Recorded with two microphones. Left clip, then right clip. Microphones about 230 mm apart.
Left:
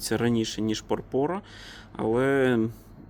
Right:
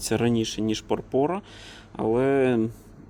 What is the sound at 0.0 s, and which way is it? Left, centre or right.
Speech, centre.